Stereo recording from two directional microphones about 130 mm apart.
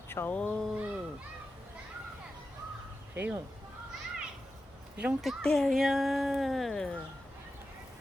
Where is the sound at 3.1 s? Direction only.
15° right (ahead or behind).